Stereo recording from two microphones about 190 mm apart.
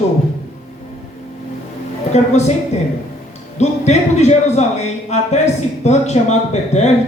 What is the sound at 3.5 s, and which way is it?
A man's voice, 35° left (ahead or behind).